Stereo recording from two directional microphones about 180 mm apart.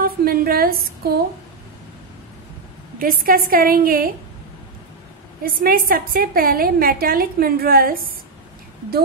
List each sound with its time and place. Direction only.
0.0 s a woman's voice: 55° right (ahead or behind)
3.0 s a woman's voice: 55° right (ahead or behind)
5.4 s a woman's voice: 55° right (ahead or behind)